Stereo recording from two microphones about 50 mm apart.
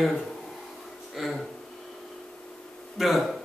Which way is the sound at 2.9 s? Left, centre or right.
Centre.